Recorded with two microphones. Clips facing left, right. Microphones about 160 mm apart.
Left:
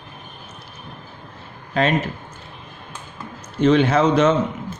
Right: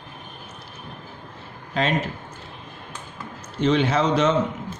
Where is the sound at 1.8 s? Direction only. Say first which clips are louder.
Left 4 dB; 60° left (ahead or behind).